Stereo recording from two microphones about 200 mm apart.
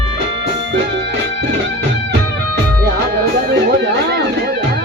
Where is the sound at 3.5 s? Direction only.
55° right (ahead or behind).